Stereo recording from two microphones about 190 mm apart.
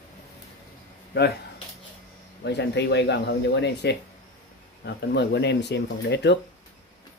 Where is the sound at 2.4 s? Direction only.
65° left (ahead or behind).